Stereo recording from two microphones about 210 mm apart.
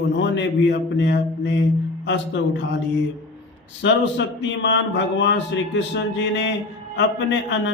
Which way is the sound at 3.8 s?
55° left (ahead or behind).